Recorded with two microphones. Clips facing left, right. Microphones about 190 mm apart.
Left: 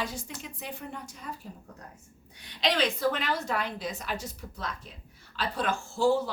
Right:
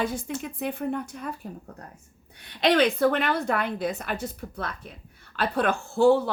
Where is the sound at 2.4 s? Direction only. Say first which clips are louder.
Right 7 dB; 55° right (ahead or behind).